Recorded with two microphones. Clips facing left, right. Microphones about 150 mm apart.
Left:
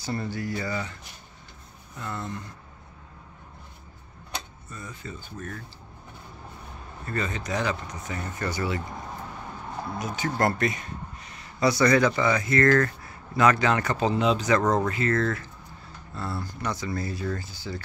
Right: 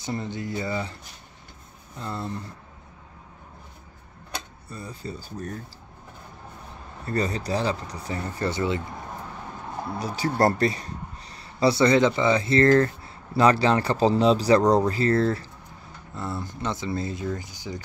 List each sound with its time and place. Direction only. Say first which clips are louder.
0.0 s speech: even; 20° right (ahead or behind)
2.0 s speech: right 2 dB; 30° right (ahead or behind)
4.6 s speech: right 3 dB; 35° right (ahead or behind)
7.1 s speech: right 4 dB; 35° right (ahead or behind)
9.9 s speech: right 4 dB; 35° right (ahead or behind)
16.2 s speech: right 1 dB; 20° right (ahead or behind)